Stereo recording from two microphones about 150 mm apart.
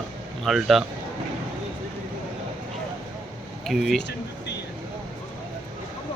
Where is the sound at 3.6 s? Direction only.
Centre (ahead or behind).